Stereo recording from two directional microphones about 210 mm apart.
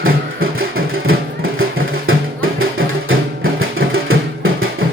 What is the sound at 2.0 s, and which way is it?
Music, 75° right (ahead or behind).